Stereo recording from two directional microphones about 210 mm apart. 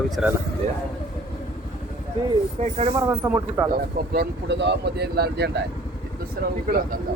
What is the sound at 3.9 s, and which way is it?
Speech, 45° right (ahead or behind).